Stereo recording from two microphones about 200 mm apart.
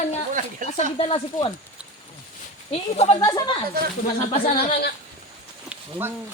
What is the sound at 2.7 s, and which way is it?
Speech, 30° left (ahead or behind).